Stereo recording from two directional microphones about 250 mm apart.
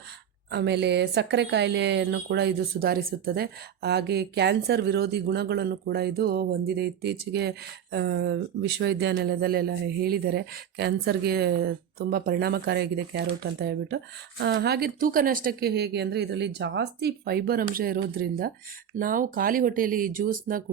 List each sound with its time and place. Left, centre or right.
0.5 s speech: right